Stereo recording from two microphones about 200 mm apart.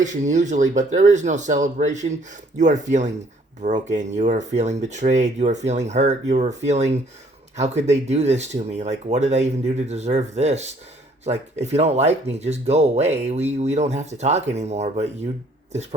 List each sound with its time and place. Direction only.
0.0 s speech: 40° right (ahead or behind)